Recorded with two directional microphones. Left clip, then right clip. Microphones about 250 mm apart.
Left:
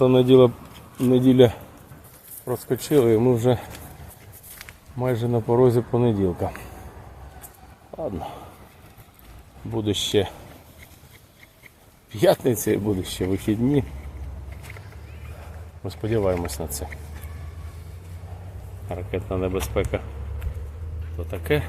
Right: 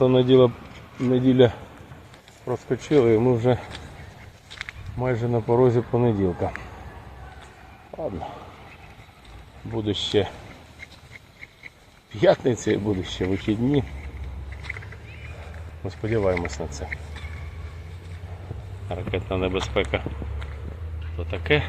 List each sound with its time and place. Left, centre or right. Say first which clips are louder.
0.0 s speech: left 2 dB; centre
4.9 s speech: left 1 dB; centre
9.7 s speech: left 1 dB; centre
12.1 s speech: even; centre
15.8 s speech: even; centre
18.9 s speech: right 1 dB; centre
21.2 s speech: right 2 dB; centre